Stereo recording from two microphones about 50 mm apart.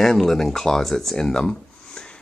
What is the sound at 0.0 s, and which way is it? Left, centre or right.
Speech, centre.